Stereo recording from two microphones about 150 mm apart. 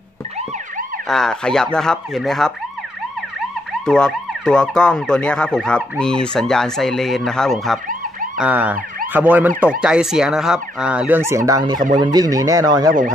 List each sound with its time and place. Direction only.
1.0 s emergency vehicle: 5° left (ahead or behind)
3.8 s emergency vehicle: 5° left (ahead or behind)
8.4 s emergency vehicle: 10° right (ahead or behind)
9.6 s speech: 5° right (ahead or behind); by 12.9 s 25° right (ahead or behind)